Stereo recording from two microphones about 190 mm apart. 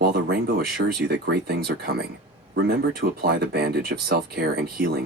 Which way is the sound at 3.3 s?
55° right (ahead or behind).